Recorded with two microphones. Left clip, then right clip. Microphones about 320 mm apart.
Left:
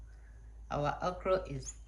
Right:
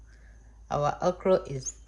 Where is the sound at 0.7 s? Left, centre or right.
Right.